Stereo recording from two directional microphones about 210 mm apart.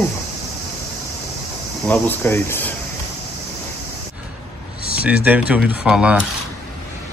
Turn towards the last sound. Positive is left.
turn(degrees=-5)  # may be behind; listen again after turning